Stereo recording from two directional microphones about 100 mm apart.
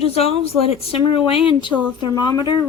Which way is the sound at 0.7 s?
70° left (ahead or behind).